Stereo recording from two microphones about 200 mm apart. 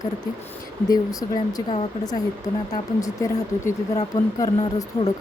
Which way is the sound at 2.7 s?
15° left (ahead or behind).